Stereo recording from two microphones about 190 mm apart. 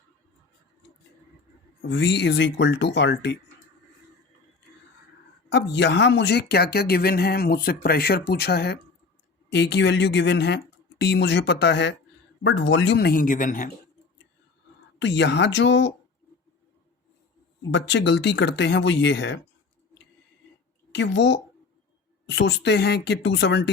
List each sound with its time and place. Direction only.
1.8 s speech: 70° left (ahead or behind)
5.5 s speech: 65° left (ahead or behind); by 13.7 s 45° left (ahead or behind)
14.9 s speech: 70° left (ahead or behind)
17.7 s speech: 70° left (ahead or behind)
20.9 s speech: 70° left (ahead or behind)